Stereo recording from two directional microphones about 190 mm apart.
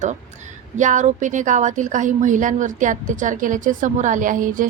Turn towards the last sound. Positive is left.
turn(degrees=-45)  # may be behind; listen again after turning